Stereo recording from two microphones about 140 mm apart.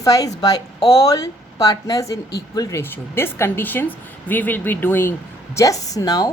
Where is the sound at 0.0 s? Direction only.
25° left (ahead or behind).